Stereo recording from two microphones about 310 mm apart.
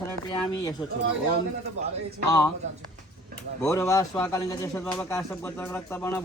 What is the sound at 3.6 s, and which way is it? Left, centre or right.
A man's voice, centre.